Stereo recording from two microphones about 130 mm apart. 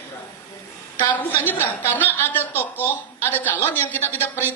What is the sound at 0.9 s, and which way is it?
A woman's voice, 15° left (ahead or behind).